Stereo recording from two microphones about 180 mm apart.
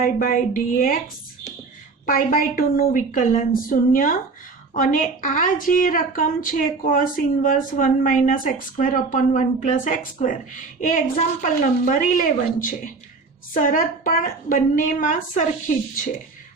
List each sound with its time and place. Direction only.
0.0 s speech: 50° left (ahead or behind)
2.0 s speech: 50° left (ahead or behind)